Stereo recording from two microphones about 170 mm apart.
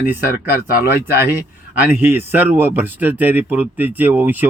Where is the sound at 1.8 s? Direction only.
10° right (ahead or behind).